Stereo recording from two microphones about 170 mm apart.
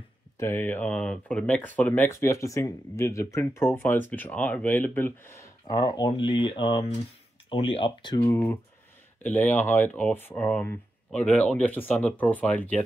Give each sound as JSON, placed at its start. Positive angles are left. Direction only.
{"t": 0.4, "sound": "speech", "side_deg": 15}
{"t": 8.2, "sound": "speech", "side_deg": 15}